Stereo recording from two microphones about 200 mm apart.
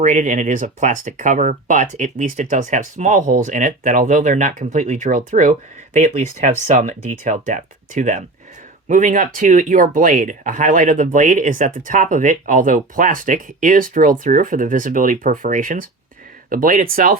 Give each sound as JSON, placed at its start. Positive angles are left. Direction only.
{"t": 0.0, "sound": "speech", "side_deg": -40}